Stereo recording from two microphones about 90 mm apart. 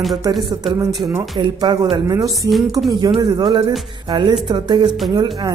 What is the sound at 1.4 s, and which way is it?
Music, 55° right (ahead or behind).